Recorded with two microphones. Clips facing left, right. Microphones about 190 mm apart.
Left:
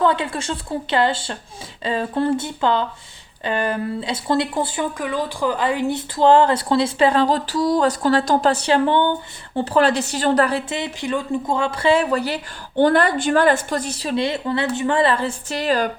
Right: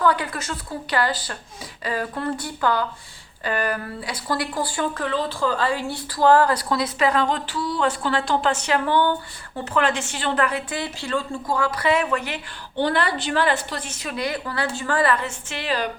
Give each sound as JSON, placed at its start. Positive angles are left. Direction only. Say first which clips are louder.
{"t": 0.0, "sound": "speech", "louder": "left 2 dB", "side_deg": 25}
{"t": 9.6, "sound": "a woman's voice", "louder": "left 5 dB", "side_deg": 35}
{"t": 12.7, "sound": "a woman's voice", "louder": "left 6 dB", "side_deg": 45}